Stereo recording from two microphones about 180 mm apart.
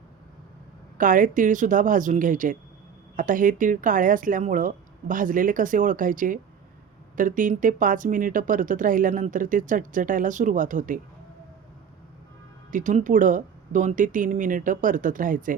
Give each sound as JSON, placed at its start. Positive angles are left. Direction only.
{"t": 0.9, "sound": "speech", "side_deg": -50}
{"t": 12.7, "sound": "speech", "side_deg": -45}